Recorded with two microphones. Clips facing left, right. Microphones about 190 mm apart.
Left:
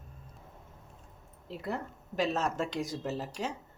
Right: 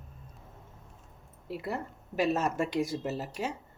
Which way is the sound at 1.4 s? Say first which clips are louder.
Right 1 dB; 10° right (ahead or behind).